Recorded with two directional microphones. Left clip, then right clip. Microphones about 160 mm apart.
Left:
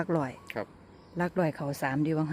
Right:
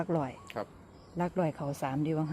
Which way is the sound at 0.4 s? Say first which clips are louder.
Left 2 dB; 55° left (ahead or behind).